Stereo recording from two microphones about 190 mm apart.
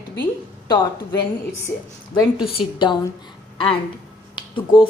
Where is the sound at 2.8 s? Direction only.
25° left (ahead or behind).